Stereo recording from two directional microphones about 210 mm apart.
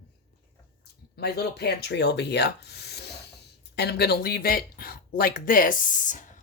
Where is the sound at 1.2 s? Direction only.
50° left (ahead or behind).